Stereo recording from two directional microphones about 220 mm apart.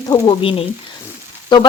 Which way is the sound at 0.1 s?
25° left (ahead or behind).